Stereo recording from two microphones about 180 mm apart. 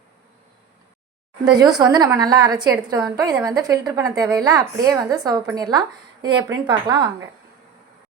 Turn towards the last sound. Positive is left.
turn(degrees=-25)  # may be behind; listen again after turning